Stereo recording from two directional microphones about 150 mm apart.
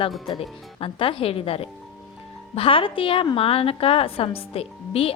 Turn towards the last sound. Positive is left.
turn(degrees=40)  # may be behind; listen again after turning